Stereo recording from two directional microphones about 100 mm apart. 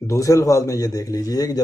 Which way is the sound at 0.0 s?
30° left (ahead or behind).